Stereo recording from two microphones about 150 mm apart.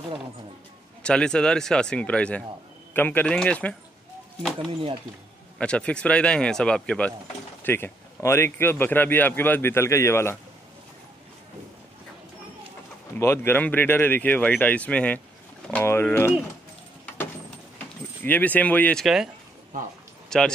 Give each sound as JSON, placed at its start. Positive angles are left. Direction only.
{"t": 1.0, "sound": "speech", "side_deg": 5}
{"t": 13.2, "sound": "speech", "side_deg": 15}
{"t": 17.7, "sound": "speech", "side_deg": 10}
{"t": 20.2, "sound": "speech", "side_deg": 5}